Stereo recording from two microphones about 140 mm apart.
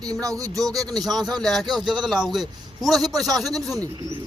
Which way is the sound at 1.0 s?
Centre (ahead or behind).